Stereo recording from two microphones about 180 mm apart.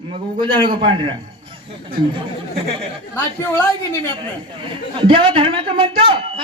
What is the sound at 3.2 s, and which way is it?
Speech, 10° left (ahead or behind).